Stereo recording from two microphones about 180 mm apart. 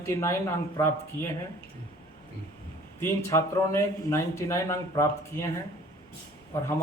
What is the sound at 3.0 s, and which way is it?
A man's voice, 15° left (ahead or behind).